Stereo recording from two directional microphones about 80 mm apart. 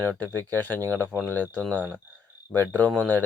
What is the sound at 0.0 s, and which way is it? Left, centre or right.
Speech, centre.